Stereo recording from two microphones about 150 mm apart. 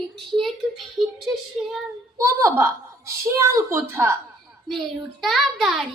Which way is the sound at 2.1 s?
20° right (ahead or behind).